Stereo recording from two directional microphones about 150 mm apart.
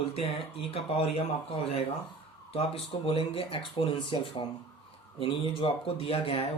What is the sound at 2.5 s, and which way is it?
Speech, 40° left (ahead or behind).